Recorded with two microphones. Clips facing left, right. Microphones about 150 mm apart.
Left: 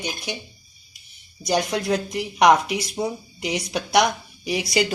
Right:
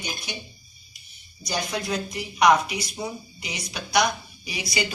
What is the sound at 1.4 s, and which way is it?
Speech, 80° left.